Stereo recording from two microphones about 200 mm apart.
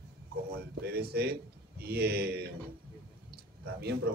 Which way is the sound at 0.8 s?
50° right (ahead or behind).